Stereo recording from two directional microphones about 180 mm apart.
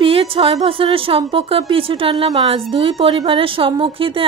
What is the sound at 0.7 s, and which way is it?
Speech, 30° right (ahead or behind).